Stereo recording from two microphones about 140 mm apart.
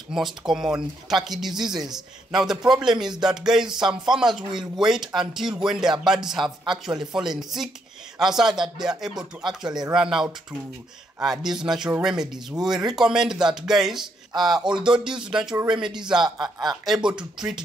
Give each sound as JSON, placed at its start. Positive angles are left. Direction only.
{"t": 0.1, "sound": "a man's voice", "side_deg": -5}
{"t": 16.4, "sound": "speech", "side_deg": -30}